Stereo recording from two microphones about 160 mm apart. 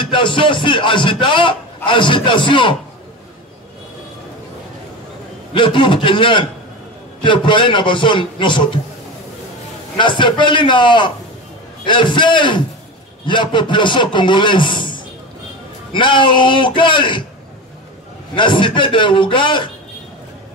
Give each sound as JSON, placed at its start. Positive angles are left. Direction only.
{"t": 0.0, "sound": "speech", "side_deg": 30}
{"t": 5.5, "sound": "a man's voice", "side_deg": 30}
{"t": 9.9, "sound": "a man's voice", "side_deg": 30}
{"t": 18.3, "sound": "speech", "side_deg": 30}